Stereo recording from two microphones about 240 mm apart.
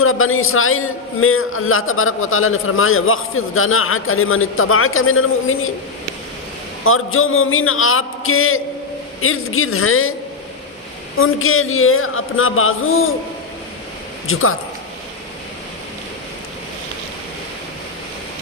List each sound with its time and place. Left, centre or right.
0.0 s a man's voice: left
6.8 s a man's voice: left
11.2 s a man's voice: left
14.3 s a man's voice: left